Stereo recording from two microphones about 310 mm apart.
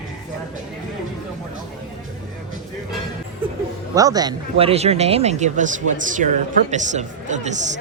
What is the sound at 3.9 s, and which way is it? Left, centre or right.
Speech, centre.